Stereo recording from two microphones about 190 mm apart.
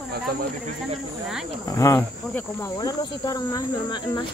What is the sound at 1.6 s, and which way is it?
Speech, 15° left (ahead or behind).